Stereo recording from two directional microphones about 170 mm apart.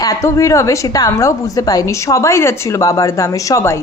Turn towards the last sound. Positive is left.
turn(degrees=20)  # may be behind; listen again after turning